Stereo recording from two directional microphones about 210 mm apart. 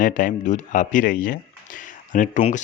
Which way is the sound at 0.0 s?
40° left (ahead or behind).